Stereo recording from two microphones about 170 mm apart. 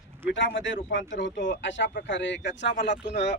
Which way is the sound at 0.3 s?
90° left.